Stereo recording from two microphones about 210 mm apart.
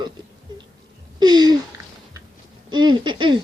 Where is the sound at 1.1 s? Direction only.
20° right (ahead or behind).